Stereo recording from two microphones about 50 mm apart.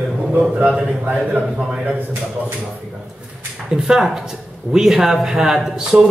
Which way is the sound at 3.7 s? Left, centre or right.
Centre.